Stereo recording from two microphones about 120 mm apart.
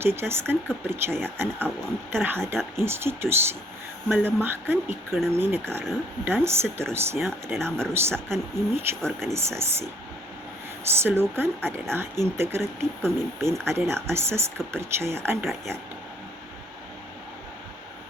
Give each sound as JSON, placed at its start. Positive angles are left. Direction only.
{"t": 0.0, "sound": "speech", "side_deg": -20}
{"t": 9.0, "sound": "speech", "side_deg": 5}
{"t": 9.3, "sound": "speech", "side_deg": -20}
{"t": 10.8, "sound": "speech", "side_deg": -20}